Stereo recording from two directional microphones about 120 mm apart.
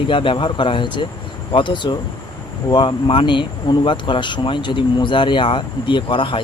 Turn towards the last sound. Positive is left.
turn(degrees=40)  # may be behind; listen again after turning